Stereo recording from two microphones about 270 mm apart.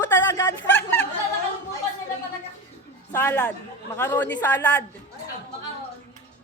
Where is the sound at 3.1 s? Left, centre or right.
Centre.